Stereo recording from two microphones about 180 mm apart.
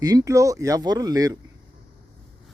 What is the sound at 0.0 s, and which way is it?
Speech, 20° right (ahead or behind).